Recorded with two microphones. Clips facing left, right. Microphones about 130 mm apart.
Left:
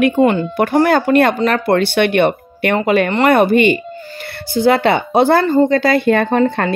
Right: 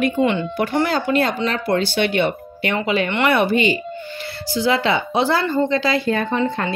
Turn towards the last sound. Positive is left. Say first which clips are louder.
# left 7 dB
turn(degrees=70)  # may be behind; listen again after turning